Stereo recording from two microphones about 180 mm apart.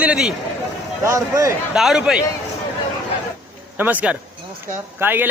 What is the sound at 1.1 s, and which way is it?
Speech, 15° right (ahead or behind).